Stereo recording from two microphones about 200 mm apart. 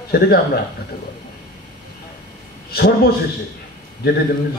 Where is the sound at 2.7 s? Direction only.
50° left (ahead or behind).